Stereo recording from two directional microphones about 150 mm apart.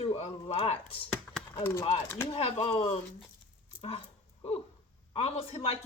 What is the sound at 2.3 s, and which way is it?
Speech, 40° left (ahead or behind).